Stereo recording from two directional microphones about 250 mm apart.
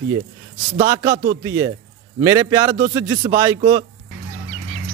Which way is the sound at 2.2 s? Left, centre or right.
Centre.